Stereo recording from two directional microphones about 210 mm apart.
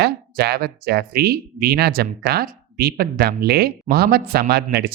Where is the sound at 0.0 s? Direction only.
50° right (ahead or behind).